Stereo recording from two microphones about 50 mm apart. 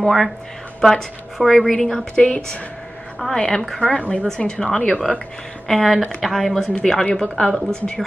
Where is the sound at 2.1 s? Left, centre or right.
Centre.